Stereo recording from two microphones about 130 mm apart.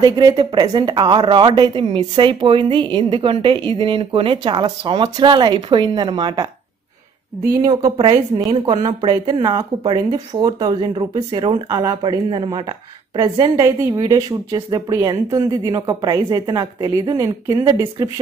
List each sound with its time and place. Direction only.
0.0 s a woman's voice: 30° right (ahead or behind)
8.5 s a woman's voice: 40° right (ahead or behind)
13.6 s a woman's voice: 25° right (ahead or behind)